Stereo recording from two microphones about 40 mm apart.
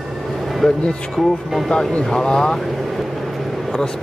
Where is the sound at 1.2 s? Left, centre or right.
Centre.